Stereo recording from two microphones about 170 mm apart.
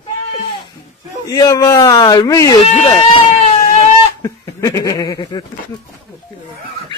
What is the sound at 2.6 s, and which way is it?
Speech, 35° left (ahead or behind).